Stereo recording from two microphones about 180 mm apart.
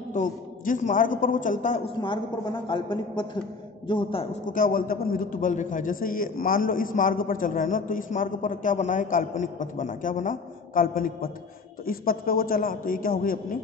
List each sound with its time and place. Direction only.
0.1 s a man's voice: 45° left (ahead or behind)
2.0 s a woman's voice: 25° left (ahead or behind)
4.5 s a man's voice: 50° left (ahead or behind)